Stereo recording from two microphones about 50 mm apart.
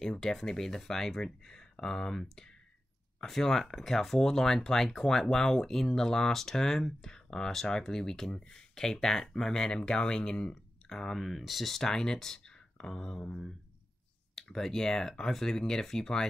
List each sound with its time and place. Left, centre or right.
0.0 s speech: centre